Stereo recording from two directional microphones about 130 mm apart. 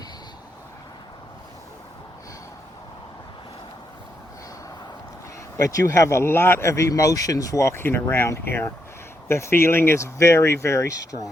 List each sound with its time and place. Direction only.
5.5 s speech: 25° left (ahead or behind)